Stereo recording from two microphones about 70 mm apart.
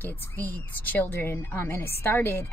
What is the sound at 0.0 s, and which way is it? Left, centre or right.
Speech, left.